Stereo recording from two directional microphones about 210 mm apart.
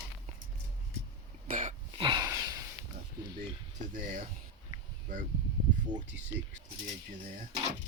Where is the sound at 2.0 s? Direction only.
20° right (ahead or behind).